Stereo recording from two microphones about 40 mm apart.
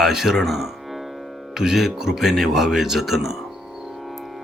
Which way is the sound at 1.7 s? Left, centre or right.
Centre.